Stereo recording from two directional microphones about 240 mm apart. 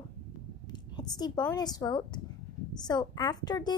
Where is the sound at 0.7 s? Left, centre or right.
Centre.